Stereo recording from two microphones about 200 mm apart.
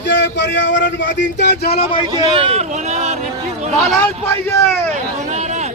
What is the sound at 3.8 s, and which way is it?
Speech, centre (ahead or behind).